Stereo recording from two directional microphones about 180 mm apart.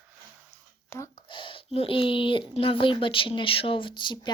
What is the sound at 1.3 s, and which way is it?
Speech, 30° left (ahead or behind).